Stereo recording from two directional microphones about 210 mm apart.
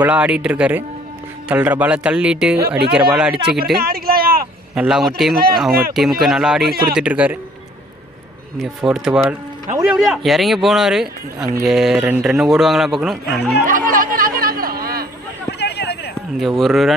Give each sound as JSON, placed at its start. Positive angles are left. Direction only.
{"t": 0.0, "sound": "speech", "side_deg": -5}
{"t": 3.7, "sound": "a sound", "side_deg": -45}
{"t": 4.7, "sound": "speech", "side_deg": 0}
{"t": 5.3, "sound": "speech", "side_deg": -45}
{"t": 5.9, "sound": "speech", "side_deg": 0}
{"t": 8.5, "sound": "speech", "side_deg": 0}
{"t": 13.7, "sound": "chatter", "side_deg": -40}
{"t": 15.6, "sound": "a sound", "side_deg": 50}
{"t": 16.3, "sound": "speech", "side_deg": 0}